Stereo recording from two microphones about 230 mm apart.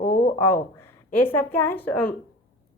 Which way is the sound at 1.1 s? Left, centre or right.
Centre.